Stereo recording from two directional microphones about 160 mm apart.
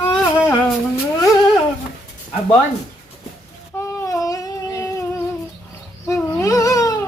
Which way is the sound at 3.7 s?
15° left (ahead or behind).